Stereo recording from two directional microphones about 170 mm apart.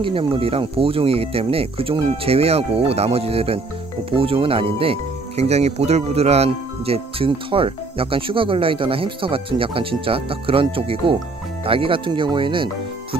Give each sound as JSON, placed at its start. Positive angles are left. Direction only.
{"t": 0.0, "sound": "speech", "side_deg": -30}